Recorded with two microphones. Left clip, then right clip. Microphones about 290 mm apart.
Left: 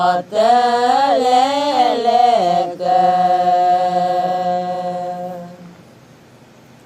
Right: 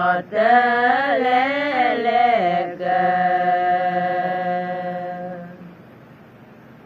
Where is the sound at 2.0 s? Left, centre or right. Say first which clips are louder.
Left 4 dB; centre.